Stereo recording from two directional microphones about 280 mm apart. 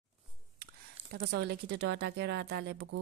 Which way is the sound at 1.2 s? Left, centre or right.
Right.